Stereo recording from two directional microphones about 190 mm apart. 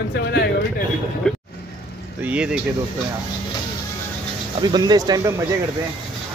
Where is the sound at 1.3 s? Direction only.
Centre (ahead or behind).